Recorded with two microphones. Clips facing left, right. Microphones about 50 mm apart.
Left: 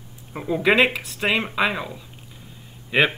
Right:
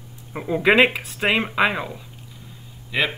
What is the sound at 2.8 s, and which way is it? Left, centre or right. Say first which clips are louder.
Speech: left 4 dB; left.